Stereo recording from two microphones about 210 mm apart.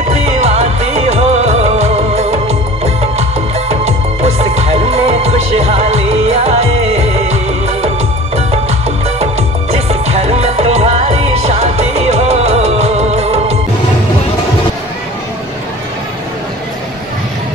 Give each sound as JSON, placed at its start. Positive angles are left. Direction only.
{"t": 0.1, "sound": "music", "side_deg": -30}
{"t": 8.4, "sound": "music", "side_deg": -30}